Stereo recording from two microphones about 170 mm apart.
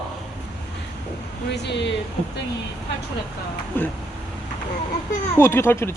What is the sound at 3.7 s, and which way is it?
Speech, 10° left (ahead or behind).